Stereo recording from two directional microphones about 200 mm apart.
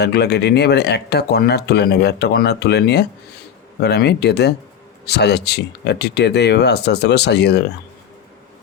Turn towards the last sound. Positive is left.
turn(degrees=55)  # may be behind; listen again after turning